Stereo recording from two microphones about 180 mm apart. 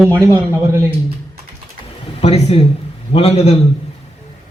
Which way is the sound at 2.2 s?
35° left (ahead or behind).